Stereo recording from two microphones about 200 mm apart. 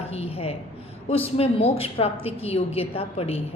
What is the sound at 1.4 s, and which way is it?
A woman's voice, 30° left (ahead or behind).